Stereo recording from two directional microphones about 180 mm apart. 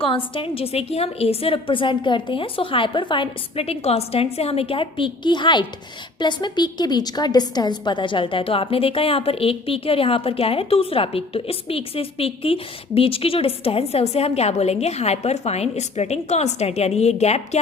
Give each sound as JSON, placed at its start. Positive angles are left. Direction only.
{"t": 0.3, "sound": "a woman's voice", "side_deg": 30}